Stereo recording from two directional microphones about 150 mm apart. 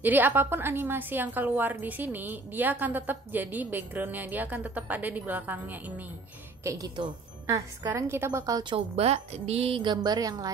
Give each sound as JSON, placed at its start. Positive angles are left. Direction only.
{"t": 0.0, "sound": "a woman's voice", "side_deg": -10}
{"t": 6.6, "sound": "a woman's voice", "side_deg": -25}
{"t": 8.7, "sound": "speech", "side_deg": -40}